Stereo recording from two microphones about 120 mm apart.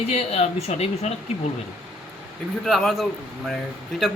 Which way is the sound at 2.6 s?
Centre (ahead or behind).